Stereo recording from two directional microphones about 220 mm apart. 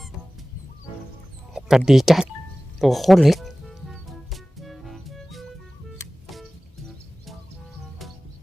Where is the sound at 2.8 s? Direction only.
Centre (ahead or behind).